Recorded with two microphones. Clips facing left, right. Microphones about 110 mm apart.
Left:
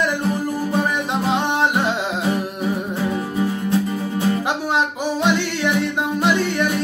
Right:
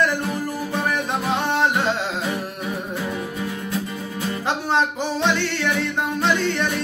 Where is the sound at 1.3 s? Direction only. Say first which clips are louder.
Left 1 dB; 15° left (ahead or behind).